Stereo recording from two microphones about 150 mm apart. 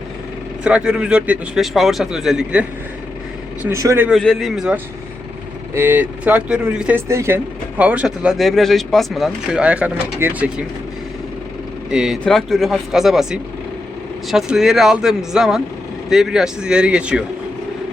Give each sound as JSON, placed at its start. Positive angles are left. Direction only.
{"t": 0.6, "sound": "speech", "side_deg": -5}
{"t": 3.6, "sound": "speech", "side_deg": -20}
{"t": 4.1, "sound": "speech", "side_deg": 0}
{"t": 11.9, "sound": "speech", "side_deg": -5}